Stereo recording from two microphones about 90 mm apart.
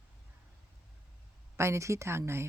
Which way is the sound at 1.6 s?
30° right (ahead or behind).